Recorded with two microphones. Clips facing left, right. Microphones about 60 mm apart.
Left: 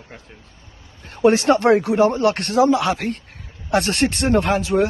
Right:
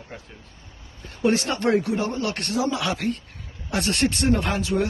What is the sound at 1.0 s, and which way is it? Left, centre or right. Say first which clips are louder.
Speech: left 8 dB; left.